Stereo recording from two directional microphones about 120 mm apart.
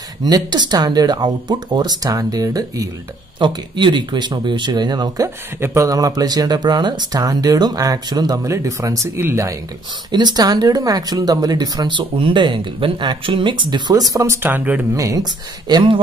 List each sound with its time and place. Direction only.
0.2 s speech: 35° right (ahead or behind)
3.3 s speech: 40° right (ahead or behind); by 9.6 s 20° right (ahead or behind)
10.1 s speech: 35° right (ahead or behind); by 14.9 s 15° right (ahead or behind)
15.0 s speech: 30° right (ahead or behind)
15.7 s speech: 45° right (ahead or behind)